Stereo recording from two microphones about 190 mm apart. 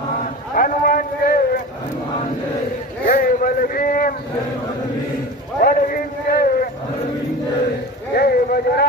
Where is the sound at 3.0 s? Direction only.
50° left (ahead or behind).